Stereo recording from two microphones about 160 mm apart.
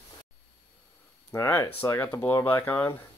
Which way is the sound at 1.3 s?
15° left (ahead or behind).